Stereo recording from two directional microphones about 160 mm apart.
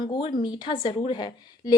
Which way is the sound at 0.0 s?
30° left (ahead or behind).